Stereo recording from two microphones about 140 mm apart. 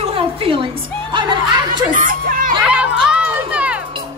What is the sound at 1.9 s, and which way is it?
Speech, 70° right (ahead or behind).